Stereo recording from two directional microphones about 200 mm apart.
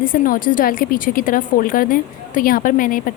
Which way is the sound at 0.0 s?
45° left (ahead or behind).